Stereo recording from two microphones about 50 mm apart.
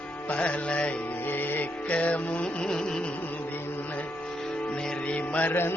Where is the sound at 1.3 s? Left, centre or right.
Left.